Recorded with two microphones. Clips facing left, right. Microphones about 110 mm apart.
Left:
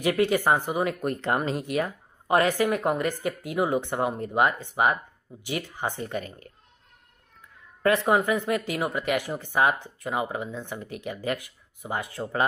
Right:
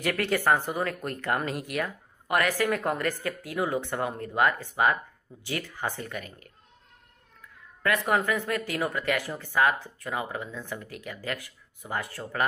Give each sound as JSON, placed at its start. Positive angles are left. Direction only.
{"t": 0.0, "sound": "speech", "side_deg": 15}
{"t": 7.8, "sound": "speech", "side_deg": 25}